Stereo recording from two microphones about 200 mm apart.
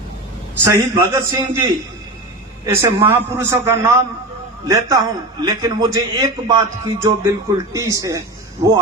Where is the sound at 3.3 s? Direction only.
15° right (ahead or behind).